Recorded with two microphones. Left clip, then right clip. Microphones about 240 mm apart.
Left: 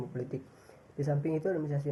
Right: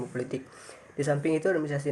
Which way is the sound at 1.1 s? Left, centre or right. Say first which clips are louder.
Right 6 dB; right.